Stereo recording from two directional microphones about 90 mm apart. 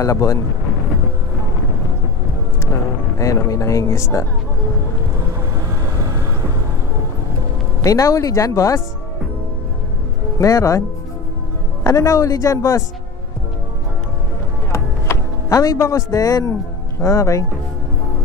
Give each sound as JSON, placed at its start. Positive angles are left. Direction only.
{"t": 0.0, "sound": "speech", "side_deg": 35}
{"t": 3.2, "sound": "speech", "side_deg": 35}
{"t": 7.8, "sound": "speech", "side_deg": 40}
{"t": 10.4, "sound": "speech", "side_deg": 35}
{"t": 11.8, "sound": "speech", "side_deg": 35}
{"t": 14.7, "sound": "music", "side_deg": 35}
{"t": 17.0, "sound": "speech", "side_deg": 35}